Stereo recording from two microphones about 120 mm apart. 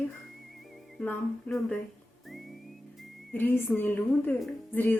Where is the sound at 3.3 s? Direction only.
15° left (ahead or behind).